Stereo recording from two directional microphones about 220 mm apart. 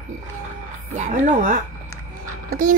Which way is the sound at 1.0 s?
35° right (ahead or behind).